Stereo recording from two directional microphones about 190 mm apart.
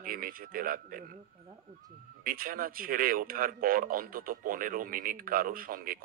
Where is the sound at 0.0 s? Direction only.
50° right (ahead or behind).